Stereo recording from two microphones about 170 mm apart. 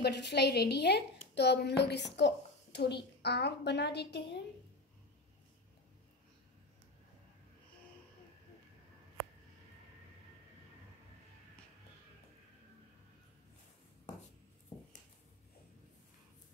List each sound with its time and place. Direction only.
0.0 s a woman's voice: 80° left